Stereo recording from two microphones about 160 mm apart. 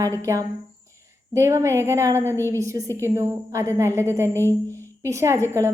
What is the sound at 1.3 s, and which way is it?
A woman's voice, 20° right (ahead or behind).